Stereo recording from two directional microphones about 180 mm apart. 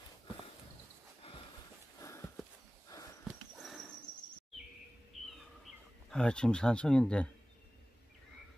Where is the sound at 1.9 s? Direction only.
15° left (ahead or behind).